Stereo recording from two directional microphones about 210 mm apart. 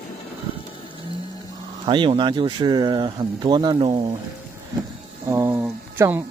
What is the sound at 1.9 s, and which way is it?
Speech, 20° right (ahead or behind).